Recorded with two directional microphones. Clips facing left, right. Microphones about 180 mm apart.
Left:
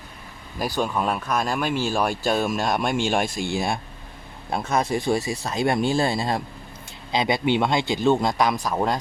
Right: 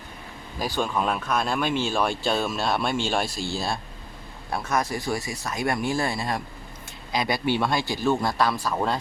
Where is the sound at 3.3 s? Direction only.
50° left (ahead or behind).